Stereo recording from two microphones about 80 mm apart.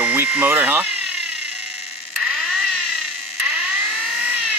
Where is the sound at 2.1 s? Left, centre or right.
Centre.